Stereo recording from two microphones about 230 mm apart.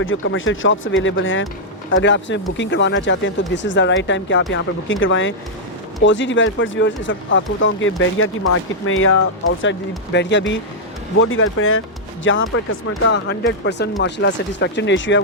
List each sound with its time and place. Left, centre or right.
0.0 s speech: left